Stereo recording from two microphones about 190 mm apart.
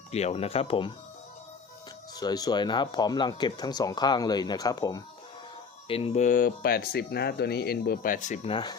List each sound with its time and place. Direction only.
0.1 s speech: 35° left (ahead or behind)
2.1 s speech: 20° left (ahead or behind)
5.9 s speech: 30° left (ahead or behind)